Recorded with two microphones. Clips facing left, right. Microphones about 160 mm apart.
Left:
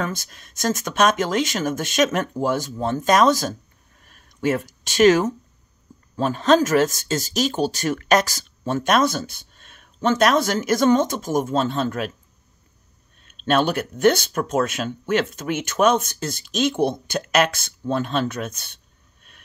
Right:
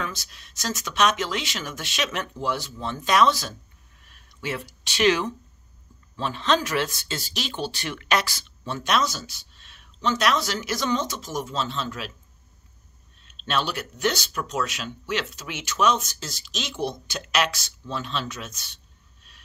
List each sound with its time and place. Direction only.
0.0 s speech: 50° left (ahead or behind)
4.0 s a sound: 45° left (ahead or behind)
6.1 s speech: 45° left (ahead or behind)
13.2 s speech: 50° left (ahead or behind)